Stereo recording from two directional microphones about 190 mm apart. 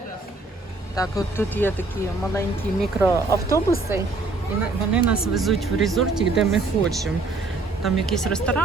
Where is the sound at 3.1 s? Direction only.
15° left (ahead or behind).